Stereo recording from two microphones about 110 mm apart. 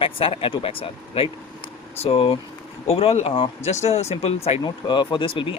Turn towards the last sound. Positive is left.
turn(degrees=45)  # may be behind; listen again after turning